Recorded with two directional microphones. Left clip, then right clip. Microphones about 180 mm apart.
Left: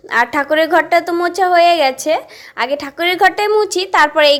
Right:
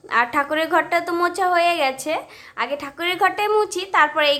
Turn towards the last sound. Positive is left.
turn(degrees=25)  # may be behind; listen again after turning